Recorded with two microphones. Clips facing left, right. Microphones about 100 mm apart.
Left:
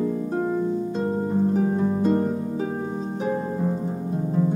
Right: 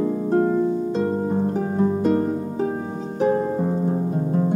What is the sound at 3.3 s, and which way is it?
Harp, 20° right (ahead or behind).